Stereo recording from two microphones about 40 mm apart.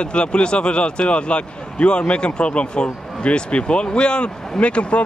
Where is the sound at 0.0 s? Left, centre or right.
Left.